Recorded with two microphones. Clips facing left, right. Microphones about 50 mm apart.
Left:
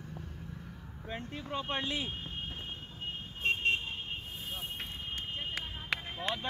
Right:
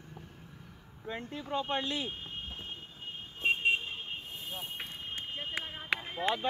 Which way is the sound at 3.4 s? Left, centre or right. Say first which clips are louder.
Right 2 dB; centre.